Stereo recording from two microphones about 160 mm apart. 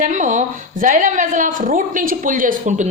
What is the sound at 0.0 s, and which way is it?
A woman's voice, 50° right (ahead or behind).